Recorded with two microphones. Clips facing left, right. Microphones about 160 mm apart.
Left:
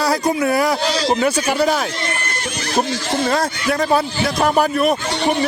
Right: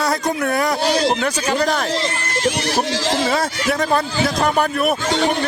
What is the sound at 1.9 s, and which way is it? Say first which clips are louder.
Speech: right 3 dB; 90° right.